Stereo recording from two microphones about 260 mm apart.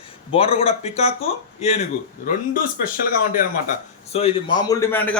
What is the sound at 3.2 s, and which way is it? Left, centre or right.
Speech, left.